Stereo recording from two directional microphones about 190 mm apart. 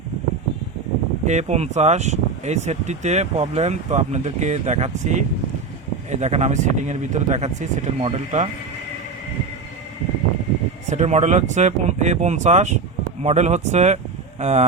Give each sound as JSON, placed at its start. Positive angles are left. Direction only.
{"t": 1.2, "sound": "speech", "side_deg": -35}
{"t": 10.8, "sound": "speech", "side_deg": -35}